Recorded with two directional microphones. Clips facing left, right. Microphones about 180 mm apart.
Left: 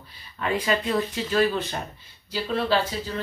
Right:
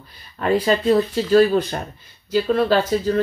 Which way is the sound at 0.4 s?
40° right (ahead or behind).